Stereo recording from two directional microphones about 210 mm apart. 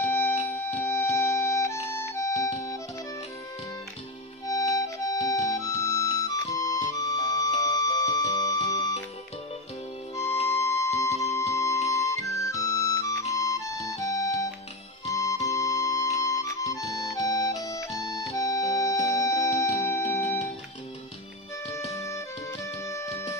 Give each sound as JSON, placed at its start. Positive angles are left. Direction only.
{"t": 0.0, "sound": "music", "side_deg": 10}
{"t": 4.5, "sound": "music", "side_deg": 15}
{"t": 10.4, "sound": "music", "side_deg": 15}
{"t": 21.6, "sound": "music", "side_deg": 15}